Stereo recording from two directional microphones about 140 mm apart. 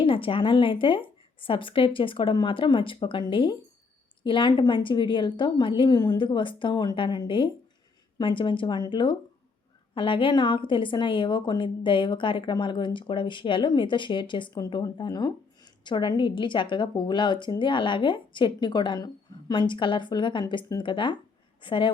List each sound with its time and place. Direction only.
0.0 s a woman's voice: 40° left (ahead or behind)